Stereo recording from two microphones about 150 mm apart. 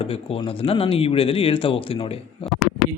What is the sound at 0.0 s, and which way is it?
Speech, 40° left (ahead or behind).